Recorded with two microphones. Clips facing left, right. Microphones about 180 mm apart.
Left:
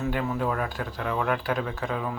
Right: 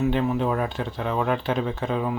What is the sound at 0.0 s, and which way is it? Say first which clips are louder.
Speech: right 5 dB; 20° right (ahead or behind).